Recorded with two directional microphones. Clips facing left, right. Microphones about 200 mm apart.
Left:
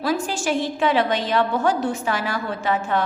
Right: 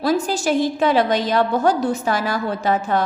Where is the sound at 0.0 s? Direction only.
40° right (ahead or behind).